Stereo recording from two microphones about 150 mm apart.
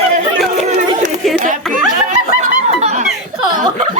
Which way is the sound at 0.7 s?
55° right (ahead or behind).